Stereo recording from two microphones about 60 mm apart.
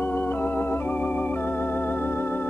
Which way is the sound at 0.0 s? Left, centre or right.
Left.